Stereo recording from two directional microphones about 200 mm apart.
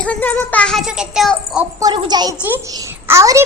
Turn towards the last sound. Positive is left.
turn(degrees=-15)  # may be behind; listen again after turning